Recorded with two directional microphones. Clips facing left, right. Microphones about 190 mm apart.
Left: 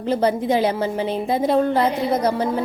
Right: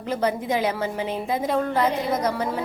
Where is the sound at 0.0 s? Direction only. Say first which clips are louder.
Left 5 dB; 30° left (ahead or behind).